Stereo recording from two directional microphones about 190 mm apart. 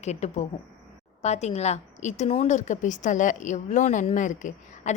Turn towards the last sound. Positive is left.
turn(degrees=40)  # may be behind; listen again after turning